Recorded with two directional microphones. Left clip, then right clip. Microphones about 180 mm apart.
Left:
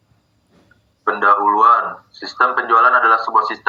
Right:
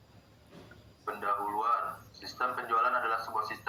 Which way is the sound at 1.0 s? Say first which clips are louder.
Left 19 dB; 55° left (ahead or behind).